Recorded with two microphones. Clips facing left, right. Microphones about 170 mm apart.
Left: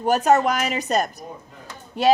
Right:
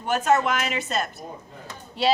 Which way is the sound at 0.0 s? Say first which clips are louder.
Left 4 dB; 40° left (ahead or behind).